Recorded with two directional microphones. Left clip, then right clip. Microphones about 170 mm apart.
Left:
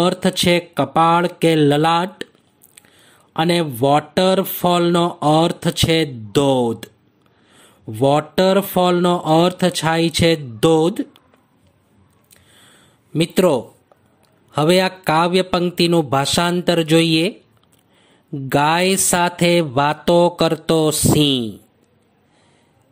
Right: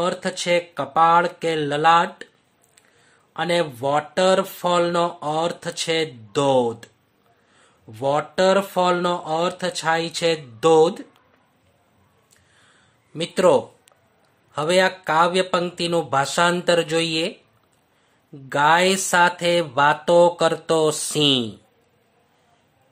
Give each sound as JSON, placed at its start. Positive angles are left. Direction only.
{"t": 0.0, "sound": "speech", "side_deg": 45}
{"t": 12.5, "sound": "a sound", "side_deg": 40}
{"t": 14.5, "sound": "speech", "side_deg": 45}
{"t": 18.3, "sound": "speech", "side_deg": 45}